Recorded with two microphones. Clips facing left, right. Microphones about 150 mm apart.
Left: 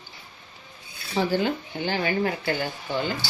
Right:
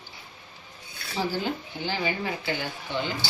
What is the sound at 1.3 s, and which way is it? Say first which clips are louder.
Speech: left 5 dB; 60° left (ahead or behind).